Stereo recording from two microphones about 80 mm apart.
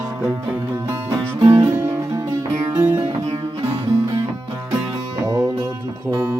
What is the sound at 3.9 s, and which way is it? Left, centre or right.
Music, right.